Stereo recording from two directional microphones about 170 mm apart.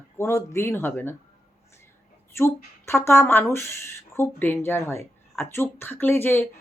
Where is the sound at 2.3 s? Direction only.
15° left (ahead or behind).